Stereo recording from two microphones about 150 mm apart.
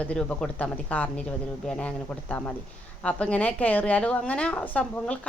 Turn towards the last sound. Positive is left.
turn(degrees=10)  # may be behind; listen again after turning